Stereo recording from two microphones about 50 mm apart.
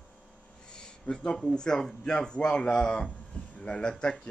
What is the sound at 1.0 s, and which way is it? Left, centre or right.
A man's voice, centre.